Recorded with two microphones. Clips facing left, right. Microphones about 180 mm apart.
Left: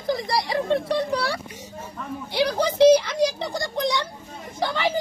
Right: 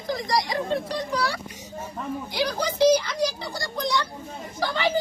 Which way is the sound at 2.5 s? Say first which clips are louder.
Left 4 dB; 25° left (ahead or behind).